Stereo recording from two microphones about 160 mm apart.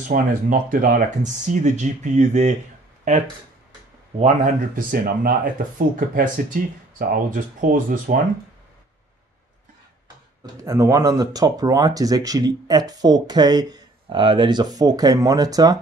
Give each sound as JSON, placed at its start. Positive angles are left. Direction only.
{"t": 0.1, "sound": "speech", "side_deg": -60}
{"t": 4.2, "sound": "speech", "side_deg": -55}
{"t": 10.4, "sound": "speech", "side_deg": -20}